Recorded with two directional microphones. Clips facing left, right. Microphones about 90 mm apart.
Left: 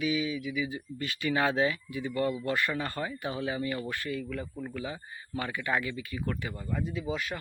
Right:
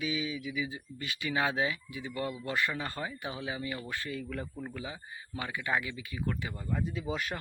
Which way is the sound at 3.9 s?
25° right (ahead or behind).